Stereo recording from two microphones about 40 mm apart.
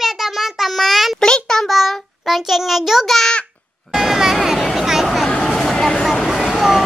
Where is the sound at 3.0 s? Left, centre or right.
Centre.